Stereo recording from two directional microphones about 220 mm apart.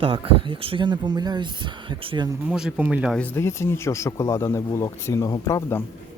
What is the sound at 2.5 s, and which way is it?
Speech, 5° right (ahead or behind).